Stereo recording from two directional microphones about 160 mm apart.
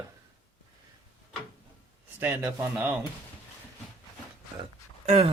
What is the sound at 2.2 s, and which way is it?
Speech, 10° right (ahead or behind).